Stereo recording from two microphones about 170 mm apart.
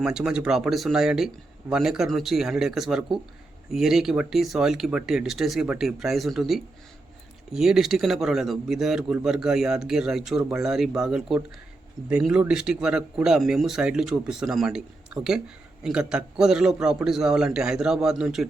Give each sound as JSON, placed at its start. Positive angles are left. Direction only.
{"t": 0.0, "sound": "speech", "side_deg": -5}